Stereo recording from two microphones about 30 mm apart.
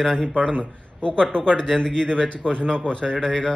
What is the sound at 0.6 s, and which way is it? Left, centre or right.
Speech, left.